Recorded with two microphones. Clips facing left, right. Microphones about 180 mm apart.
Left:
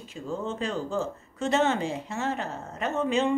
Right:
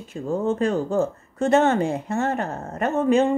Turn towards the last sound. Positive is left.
turn(degrees=-50)  # may be behind; listen again after turning